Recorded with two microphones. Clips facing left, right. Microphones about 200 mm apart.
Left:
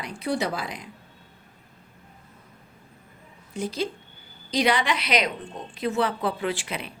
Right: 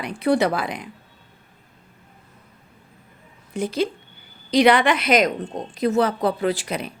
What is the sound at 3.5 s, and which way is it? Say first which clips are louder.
A woman's voice: right 5 dB; 60° right (ahead or behind).